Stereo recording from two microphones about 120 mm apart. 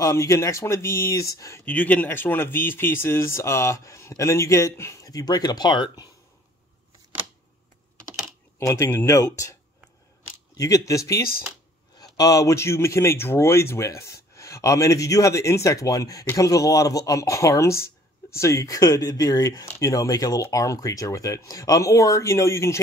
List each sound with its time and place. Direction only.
0.0 s speech: 25° left (ahead or behind)
1.7 s speech: 15° left (ahead or behind); by 6.0 s 35° left (ahead or behind)
8.5 s speech: 25° left (ahead or behind)
10.6 s speech: 25° left (ahead or behind)